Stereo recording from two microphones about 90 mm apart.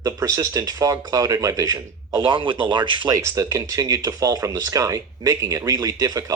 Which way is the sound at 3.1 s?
40° right (ahead or behind).